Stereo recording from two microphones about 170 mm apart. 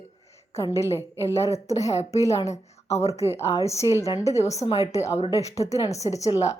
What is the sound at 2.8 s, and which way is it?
Speech, 40° left (ahead or behind).